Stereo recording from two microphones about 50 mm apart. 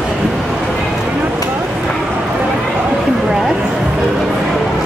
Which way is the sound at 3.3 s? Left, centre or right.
Centre.